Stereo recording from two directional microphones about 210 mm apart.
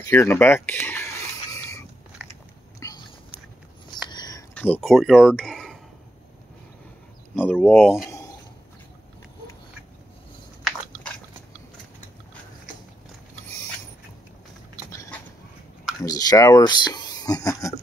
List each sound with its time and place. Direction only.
0.1 s speech: 10° left (ahead or behind)
1.5 s a sound: 15° left (ahead or behind)
2.8 s biting: 20° left (ahead or behind)
3.9 s a sound: 20° left (ahead or behind)
4.6 s speech: 5° left (ahead or behind)
7.3 s speech: 5° left (ahead or behind)
10.7 s biting: centre (ahead or behind)
14.9 s dog: 15° left (ahead or behind)
16.0 s speech: 15° left (ahead or behind)